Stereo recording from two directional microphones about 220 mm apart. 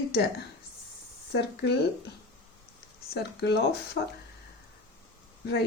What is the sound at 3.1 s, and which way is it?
Speech, 50° left (ahead or behind).